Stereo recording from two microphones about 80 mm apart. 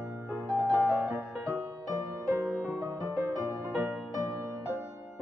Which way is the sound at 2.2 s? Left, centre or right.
Right.